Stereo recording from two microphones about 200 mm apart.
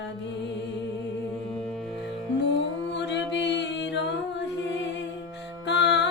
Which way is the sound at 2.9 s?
60° left (ahead or behind).